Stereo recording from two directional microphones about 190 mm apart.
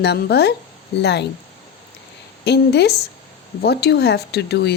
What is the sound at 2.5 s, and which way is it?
Speech, 60° left (ahead or behind).